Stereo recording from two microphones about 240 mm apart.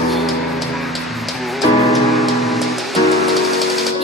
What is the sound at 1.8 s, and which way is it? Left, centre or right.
Music, centre.